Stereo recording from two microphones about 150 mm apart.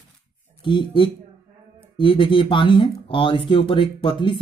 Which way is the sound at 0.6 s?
35° left (ahead or behind).